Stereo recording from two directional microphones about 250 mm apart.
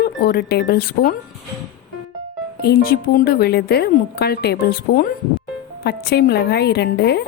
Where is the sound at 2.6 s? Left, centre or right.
Left.